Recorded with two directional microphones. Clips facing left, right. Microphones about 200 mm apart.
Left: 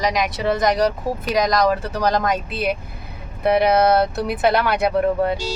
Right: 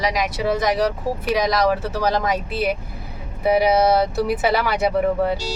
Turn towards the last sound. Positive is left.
turn(degrees=-5)  # may be behind; listen again after turning